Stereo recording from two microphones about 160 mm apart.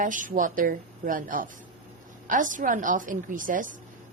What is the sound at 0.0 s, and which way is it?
A woman's voice, 55° right (ahead or behind).